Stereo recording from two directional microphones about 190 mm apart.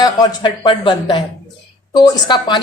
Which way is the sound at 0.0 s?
20° left (ahead or behind).